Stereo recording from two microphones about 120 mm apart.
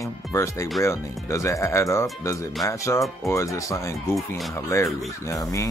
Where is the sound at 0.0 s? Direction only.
25° left (ahead or behind).